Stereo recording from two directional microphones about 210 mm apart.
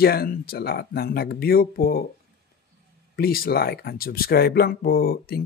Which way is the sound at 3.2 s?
45° left (ahead or behind).